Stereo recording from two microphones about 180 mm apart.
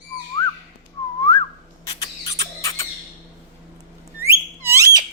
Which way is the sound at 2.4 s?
15° left (ahead or behind).